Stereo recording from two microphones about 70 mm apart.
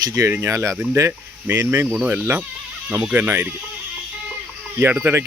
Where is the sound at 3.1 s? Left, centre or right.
Right.